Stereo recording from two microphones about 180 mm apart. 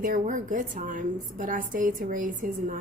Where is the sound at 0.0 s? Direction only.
50° right (ahead or behind).